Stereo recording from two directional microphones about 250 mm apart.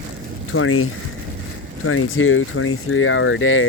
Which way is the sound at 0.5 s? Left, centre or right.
Left.